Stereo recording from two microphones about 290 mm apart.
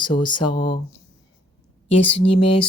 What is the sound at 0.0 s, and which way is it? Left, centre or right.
Speech, centre.